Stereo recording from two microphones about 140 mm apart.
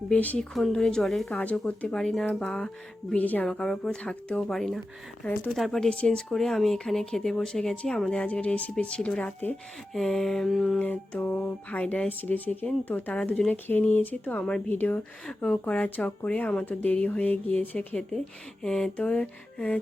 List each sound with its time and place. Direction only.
0.1 s speech: 10° left (ahead or behind)
10.8 s speech: 10° left (ahead or behind)